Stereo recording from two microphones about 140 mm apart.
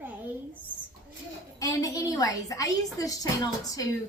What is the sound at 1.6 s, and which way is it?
A woman's voice, 25° left (ahead or behind).